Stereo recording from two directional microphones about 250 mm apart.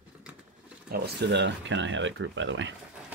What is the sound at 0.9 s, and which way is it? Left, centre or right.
Speech, right.